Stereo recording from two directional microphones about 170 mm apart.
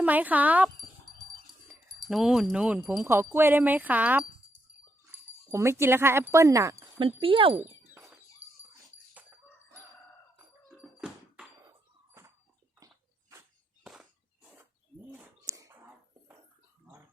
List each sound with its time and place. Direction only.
0.0 s speech: 10° right (ahead or behind)
1.1 s wind chime: centre (ahead or behind)
2.0 s speech: centre (ahead or behind)
5.5 s speech: 15° right (ahead or behind)
7.0 s speech: 30° right (ahead or behind)
7.6 s a sound: 10° right (ahead or behind)
10.3 s a sound: 5° right (ahead or behind)
13.8 s a sound: centre (ahead or behind)
15.2 s whispering: 15° right (ahead or behind)